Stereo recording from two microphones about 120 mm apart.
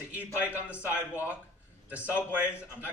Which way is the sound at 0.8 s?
20° left (ahead or behind).